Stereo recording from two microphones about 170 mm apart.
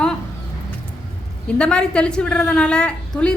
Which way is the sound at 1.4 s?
5° left (ahead or behind).